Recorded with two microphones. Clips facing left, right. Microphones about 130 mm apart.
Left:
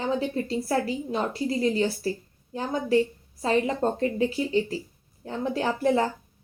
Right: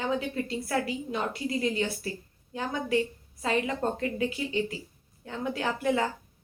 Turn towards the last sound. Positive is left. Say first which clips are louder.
# left 4 dB
turn(degrees=35)  # may be behind; listen again after turning